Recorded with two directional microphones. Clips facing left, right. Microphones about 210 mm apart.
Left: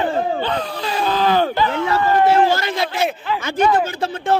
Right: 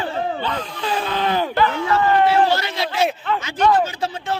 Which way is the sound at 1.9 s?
45° left (ahead or behind).